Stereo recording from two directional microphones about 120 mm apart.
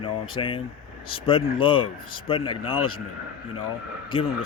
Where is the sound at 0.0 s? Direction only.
45° left (ahead or behind).